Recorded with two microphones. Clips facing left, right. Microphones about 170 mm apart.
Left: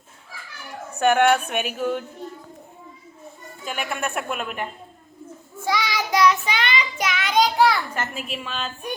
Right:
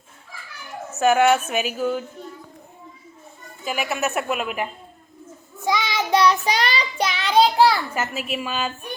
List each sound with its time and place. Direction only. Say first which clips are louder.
0.9 s speech: right 1 dB; 5° right (ahead or behind)
3.6 s speech: right 3 dB; 5° right (ahead or behind)
5.5 s child singing: right 1 dB; 20° right (ahead or behind)
7.9 s a woman's voice: right 3 dB; 5° right (ahead or behind)